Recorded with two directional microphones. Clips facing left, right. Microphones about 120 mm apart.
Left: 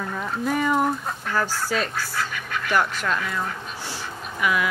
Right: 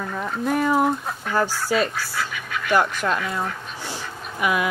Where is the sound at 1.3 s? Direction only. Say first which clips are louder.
Right 3 dB; 15° right (ahead or behind).